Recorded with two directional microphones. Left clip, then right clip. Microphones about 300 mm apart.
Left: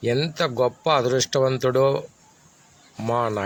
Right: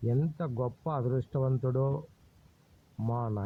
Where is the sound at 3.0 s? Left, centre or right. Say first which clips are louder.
Left 13 dB; right.